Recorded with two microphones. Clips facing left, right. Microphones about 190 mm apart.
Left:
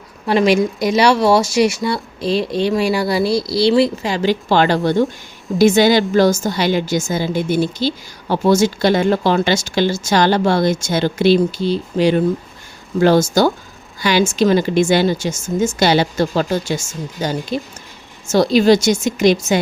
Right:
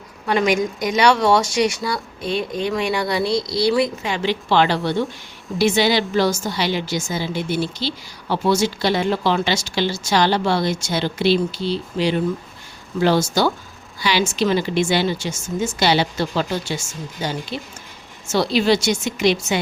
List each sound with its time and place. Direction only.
0.9 s a woman's voice: 25° left (ahead or behind); by 19.5 s 45° left (ahead or behind)